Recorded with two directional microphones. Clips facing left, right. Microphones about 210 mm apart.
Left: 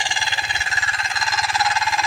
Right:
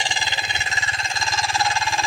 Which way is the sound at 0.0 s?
20° right (ahead or behind).